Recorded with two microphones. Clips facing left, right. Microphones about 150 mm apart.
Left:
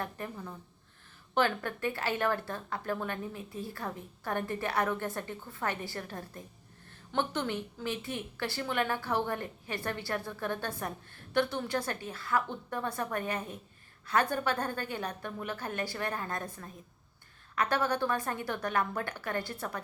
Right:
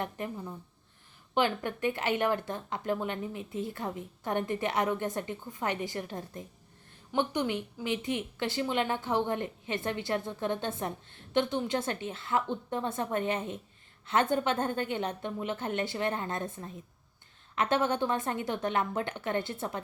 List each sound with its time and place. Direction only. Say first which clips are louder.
0.0 s a woman's voice: right 3 dB; 20° right (ahead or behind)